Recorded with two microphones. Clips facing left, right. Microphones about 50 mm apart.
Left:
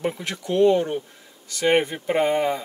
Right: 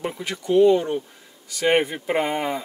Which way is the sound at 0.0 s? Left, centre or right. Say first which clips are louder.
Left 1 dB; centre.